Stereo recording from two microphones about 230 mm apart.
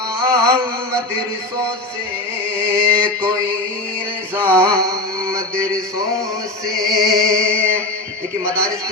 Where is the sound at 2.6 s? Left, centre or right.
Centre.